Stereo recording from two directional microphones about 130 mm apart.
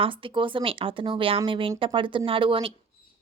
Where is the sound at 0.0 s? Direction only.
40° right (ahead or behind).